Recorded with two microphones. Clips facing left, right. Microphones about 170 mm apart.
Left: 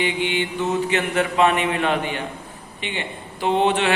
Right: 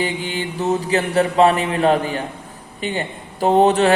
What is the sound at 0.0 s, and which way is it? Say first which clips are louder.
Speech: left 1 dB; 40° right (ahead or behind).